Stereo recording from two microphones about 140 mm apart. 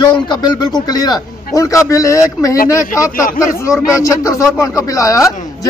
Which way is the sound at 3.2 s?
75° left (ahead or behind).